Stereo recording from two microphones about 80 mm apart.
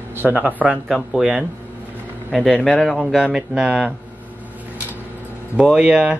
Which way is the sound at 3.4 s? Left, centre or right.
Centre.